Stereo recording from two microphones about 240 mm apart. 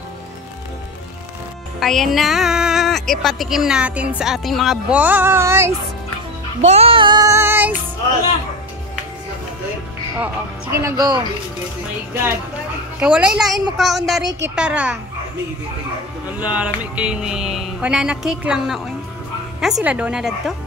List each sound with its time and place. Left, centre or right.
1.8 s speech: centre
6.6 s child singing: right; by 7.7 s centre
10.1 s speech: centre
13.0 s speech: centre
16.3 s speech: centre